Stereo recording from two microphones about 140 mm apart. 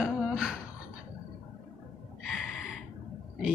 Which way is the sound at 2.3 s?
Centre (ahead or behind).